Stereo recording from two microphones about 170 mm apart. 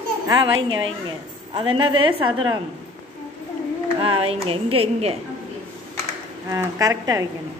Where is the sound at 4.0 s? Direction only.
35° right (ahead or behind).